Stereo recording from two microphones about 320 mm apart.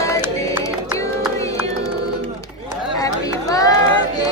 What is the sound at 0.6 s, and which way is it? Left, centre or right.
Music, centre.